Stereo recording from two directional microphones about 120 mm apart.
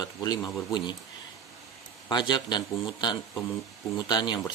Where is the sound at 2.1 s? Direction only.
40° left (ahead or behind).